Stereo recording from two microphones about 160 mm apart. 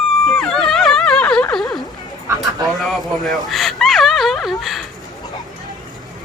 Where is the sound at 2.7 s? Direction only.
Centre (ahead or behind).